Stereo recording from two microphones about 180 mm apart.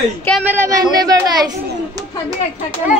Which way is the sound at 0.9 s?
20° right (ahead or behind).